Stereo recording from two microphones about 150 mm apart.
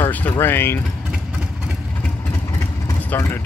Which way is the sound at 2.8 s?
15° left (ahead or behind).